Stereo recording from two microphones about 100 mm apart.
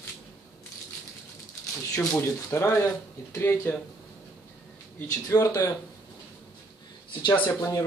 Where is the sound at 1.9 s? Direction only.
25° left (ahead or behind).